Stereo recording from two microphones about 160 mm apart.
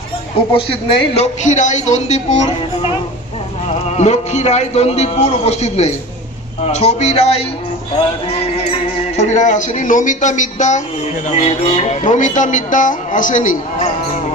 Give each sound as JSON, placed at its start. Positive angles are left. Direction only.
{"t": 0.5, "sound": "music", "side_deg": 40}
{"t": 8.6, "sound": "music", "side_deg": 40}